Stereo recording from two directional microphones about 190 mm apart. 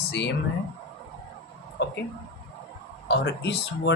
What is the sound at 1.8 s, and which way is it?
Speech, 65° left (ahead or behind).